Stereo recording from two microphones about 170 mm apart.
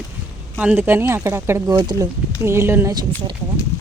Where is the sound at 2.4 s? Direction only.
15° right (ahead or behind).